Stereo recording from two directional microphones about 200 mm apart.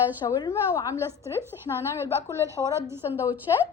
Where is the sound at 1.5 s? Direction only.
20° left (ahead or behind).